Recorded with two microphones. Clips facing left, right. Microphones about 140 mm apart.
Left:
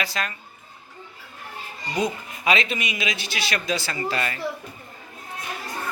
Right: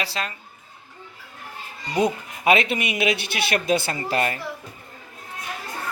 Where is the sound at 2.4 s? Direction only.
55° right (ahead or behind).